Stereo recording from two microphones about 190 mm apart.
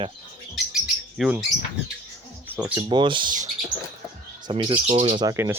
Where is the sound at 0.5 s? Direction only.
Centre (ahead or behind).